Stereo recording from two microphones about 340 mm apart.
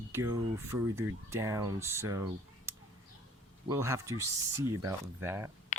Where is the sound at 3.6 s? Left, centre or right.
Centre.